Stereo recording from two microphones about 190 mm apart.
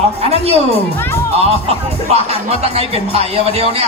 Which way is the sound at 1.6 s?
30° right (ahead or behind).